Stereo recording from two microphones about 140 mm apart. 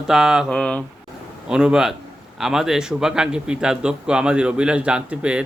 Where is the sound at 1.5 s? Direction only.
5° right (ahead or behind).